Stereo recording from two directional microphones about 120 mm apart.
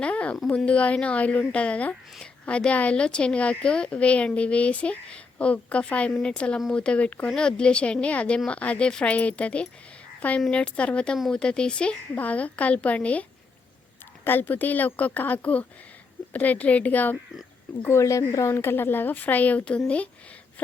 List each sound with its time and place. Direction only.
0.0 s a woman's voice: 10° left (ahead or behind)
14.3 s a woman's voice: 15° left (ahead or behind)
17.8 s a woman's voice: 25° left (ahead or behind)